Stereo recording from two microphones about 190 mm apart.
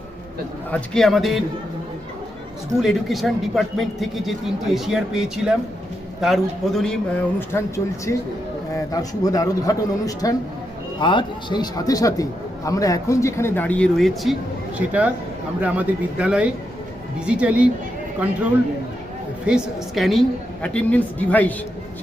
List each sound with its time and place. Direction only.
0.7 s a man's voice: centre (ahead or behind)
2.8 s a man's voice: centre (ahead or behind)
8.7 s a man's voice: 20° left (ahead or behind); by 17.7 s 5° right (ahead or behind)
19.5 s a man's voice: 5° right (ahead or behind)